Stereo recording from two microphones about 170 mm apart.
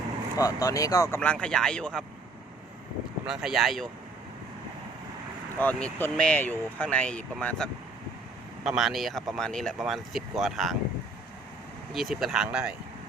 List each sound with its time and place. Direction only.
0.3 s speech: 20° left (ahead or behind)
1.2 s speech: 5° left (ahead or behind)
3.2 s speech: 5° right (ahead or behind)
5.5 s speech: 10° left (ahead or behind)
11.9 s speech: centre (ahead or behind)